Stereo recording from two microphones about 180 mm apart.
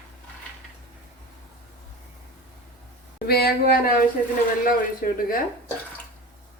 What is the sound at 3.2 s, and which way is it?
Speech, 60° left (ahead or behind).